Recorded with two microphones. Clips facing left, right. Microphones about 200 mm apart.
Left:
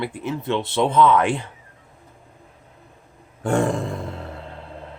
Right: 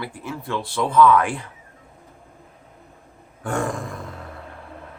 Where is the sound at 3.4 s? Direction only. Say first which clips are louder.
Left 5 dB; 25° left (ahead or behind).